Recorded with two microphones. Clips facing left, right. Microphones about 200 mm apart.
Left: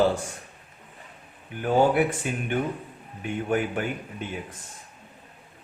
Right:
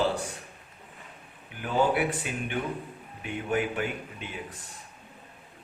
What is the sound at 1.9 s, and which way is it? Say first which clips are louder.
Speech: left 4 dB; 45° left (ahead or behind).